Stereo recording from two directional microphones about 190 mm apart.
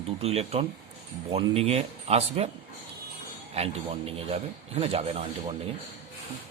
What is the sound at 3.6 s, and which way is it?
A man's voice, 30° right (ahead or behind).